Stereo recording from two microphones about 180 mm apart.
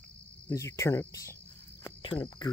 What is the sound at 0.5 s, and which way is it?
Speech, 15° left (ahead or behind).